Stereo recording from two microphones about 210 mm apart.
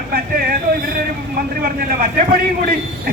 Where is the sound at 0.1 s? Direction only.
45° right (ahead or behind).